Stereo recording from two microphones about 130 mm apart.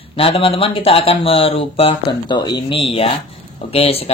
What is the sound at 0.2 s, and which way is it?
Speech, 45° left (ahead or behind).